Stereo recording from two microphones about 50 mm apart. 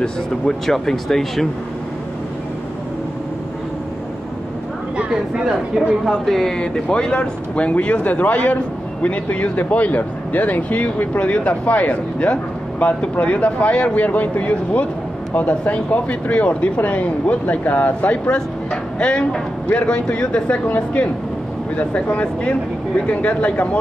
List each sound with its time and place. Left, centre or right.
0.0 s speech: centre
5.3 s a woman's voice: centre
6.0 s speech: centre; by 23.8 s left